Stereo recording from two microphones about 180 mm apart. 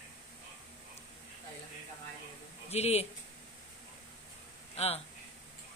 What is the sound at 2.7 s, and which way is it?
Speech, 35° left (ahead or behind).